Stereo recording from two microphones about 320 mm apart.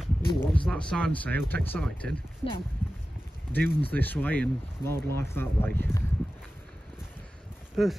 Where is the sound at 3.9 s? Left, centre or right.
Centre.